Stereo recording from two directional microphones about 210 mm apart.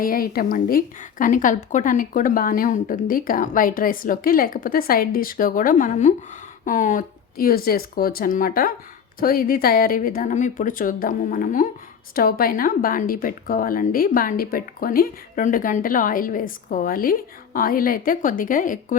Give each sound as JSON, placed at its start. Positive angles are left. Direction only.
{"t": 0.0, "sound": "speech", "side_deg": 45}